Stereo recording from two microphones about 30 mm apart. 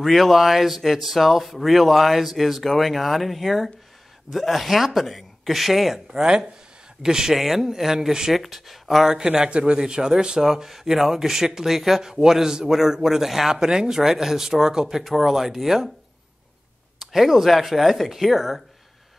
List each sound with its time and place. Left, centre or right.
0.0 s speech: centre
7.0 s a man's voice: right
7.3 s speech: centre
9.0 s a man's voice: right
9.5 s a man's voice: right
10.5 s speech: centre
12.0 s a man's voice: centre
13.6 s speech: right
17.0 s speech: centre